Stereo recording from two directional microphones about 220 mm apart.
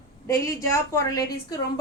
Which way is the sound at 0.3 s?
15° left (ahead or behind).